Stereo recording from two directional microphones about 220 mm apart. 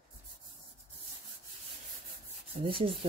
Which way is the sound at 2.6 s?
25° right (ahead or behind).